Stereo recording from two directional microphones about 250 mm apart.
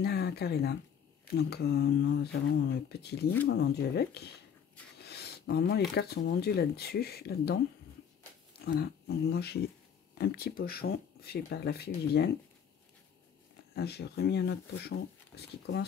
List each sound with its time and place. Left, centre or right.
0.0 s speech: left
8.6 s speech: left
13.7 s speech: left